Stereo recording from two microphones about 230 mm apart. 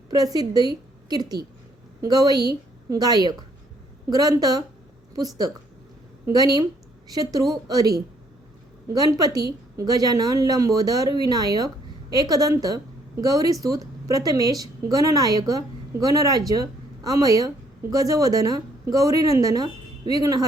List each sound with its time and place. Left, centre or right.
0.1 s a woman's voice: centre